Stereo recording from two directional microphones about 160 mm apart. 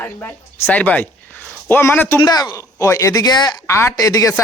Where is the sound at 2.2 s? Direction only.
25° left (ahead or behind).